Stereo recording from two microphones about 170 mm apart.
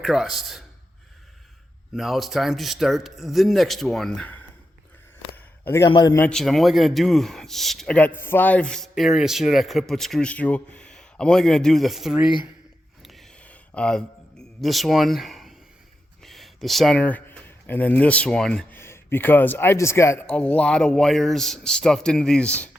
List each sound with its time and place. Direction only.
0.0 s speech: centre (ahead or behind)
2.0 s speech: centre (ahead or behind)
5.3 s a sound: 15° left (ahead or behind)
5.9 s a man's voice: 25° left (ahead or behind)
6.1 s speech: 5° left (ahead or behind)
13.0 s a sound: centre (ahead or behind)
16.2 s speech: centre (ahead or behind)